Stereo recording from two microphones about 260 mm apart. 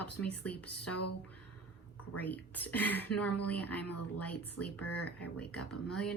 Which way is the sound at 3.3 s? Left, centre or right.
Left.